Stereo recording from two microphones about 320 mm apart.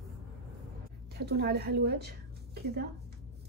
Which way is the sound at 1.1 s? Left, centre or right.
Right.